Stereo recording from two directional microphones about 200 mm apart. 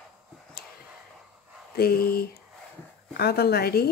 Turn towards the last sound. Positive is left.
turn(degrees=50)  # may be behind; listen again after turning